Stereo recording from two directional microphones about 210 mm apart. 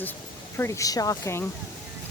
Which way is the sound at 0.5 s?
15° left (ahead or behind).